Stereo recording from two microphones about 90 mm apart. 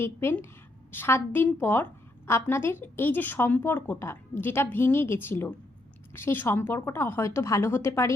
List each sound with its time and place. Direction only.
0.0 s a woman's voice: 25° left (ahead or behind)